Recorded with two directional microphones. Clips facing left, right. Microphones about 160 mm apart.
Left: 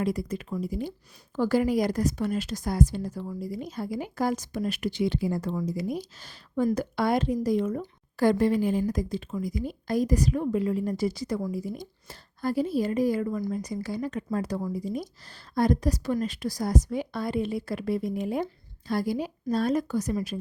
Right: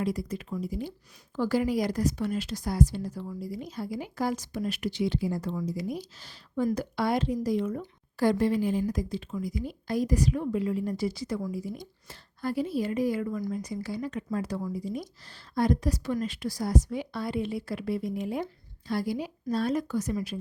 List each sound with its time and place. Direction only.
0.0 s speech: 55° left (ahead or behind)